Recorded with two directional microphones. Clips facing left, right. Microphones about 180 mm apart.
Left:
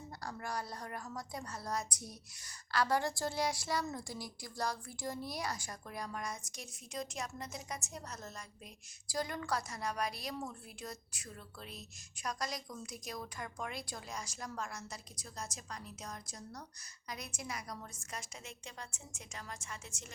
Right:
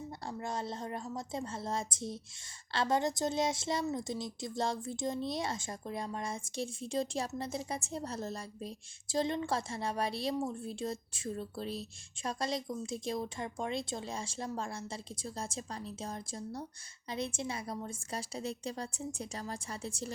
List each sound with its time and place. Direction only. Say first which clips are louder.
0.3 s a woman's voice: right 3 dB; 25° right (ahead or behind)